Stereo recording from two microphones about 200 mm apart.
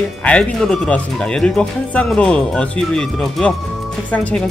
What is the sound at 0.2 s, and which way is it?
Speech, 5° left (ahead or behind).